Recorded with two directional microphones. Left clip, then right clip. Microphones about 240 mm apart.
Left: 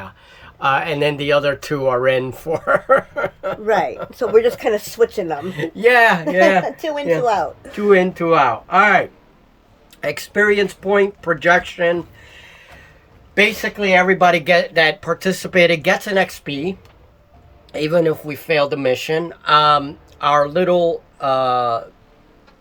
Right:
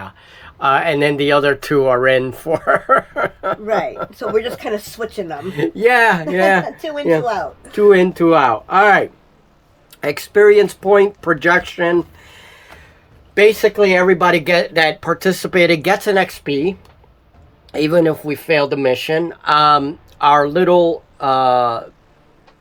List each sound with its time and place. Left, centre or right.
0.0 s speech: centre
3.7 s speech: left
5.4 s speech: centre
6.7 s speech: left
7.7 s speech: right